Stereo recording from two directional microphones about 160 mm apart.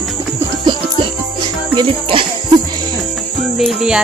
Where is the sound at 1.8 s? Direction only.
35° right (ahead or behind).